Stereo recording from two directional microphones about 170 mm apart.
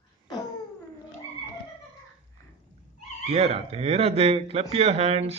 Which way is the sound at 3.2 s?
40° right (ahead or behind).